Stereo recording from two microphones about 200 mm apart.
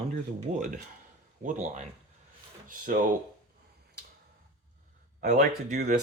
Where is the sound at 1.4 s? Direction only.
40° right (ahead or behind).